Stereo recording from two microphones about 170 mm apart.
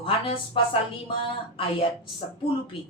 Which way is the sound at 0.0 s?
30° left (ahead or behind).